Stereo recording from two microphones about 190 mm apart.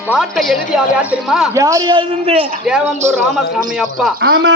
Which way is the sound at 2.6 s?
5° right (ahead or behind).